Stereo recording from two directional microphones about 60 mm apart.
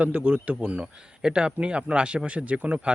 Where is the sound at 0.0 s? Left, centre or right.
Right.